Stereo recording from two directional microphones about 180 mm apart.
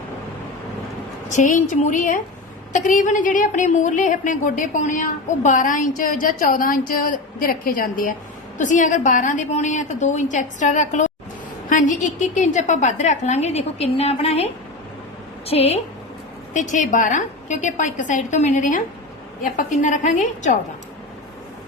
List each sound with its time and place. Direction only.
1.3 s a woman's voice: 45° left (ahead or behind)
16.6 s a woman's voice: 45° left (ahead or behind)